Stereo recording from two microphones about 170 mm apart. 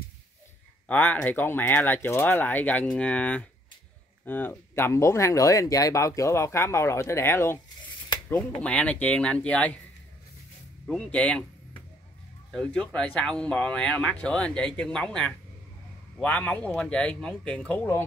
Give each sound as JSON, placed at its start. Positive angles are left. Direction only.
{"t": 0.8, "sound": "speech", "side_deg": 10}
{"t": 8.5, "sound": "speech", "side_deg": 5}
{"t": 10.9, "sound": "speech", "side_deg": 5}